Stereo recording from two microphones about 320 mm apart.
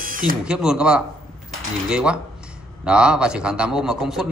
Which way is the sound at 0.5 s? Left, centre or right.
Centre.